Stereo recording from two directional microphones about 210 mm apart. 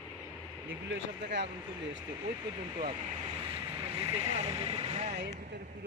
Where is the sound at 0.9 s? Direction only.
55° right (ahead or behind).